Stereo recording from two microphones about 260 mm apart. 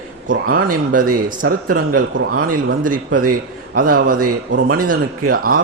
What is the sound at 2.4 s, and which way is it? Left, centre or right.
A man's voice, right.